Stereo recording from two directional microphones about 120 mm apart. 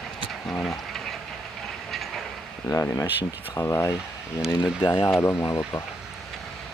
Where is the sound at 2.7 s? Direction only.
25° left (ahead or behind).